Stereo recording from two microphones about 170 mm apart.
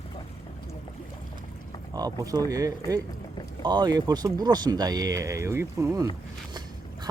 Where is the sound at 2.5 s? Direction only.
20° right (ahead or behind).